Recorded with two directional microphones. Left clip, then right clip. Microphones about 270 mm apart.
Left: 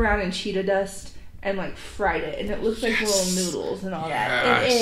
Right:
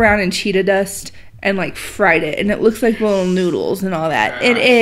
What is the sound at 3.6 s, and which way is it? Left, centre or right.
A woman's voice, right.